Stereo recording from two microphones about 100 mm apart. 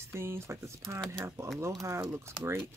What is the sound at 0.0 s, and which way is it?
Speech, 25° right (ahead or behind).